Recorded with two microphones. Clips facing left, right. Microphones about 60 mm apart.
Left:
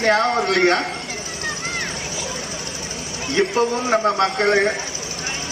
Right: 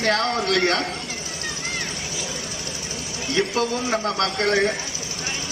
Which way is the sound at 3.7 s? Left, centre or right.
Left.